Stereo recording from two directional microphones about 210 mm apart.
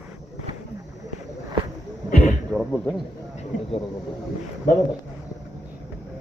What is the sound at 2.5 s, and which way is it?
Speech, centre (ahead or behind).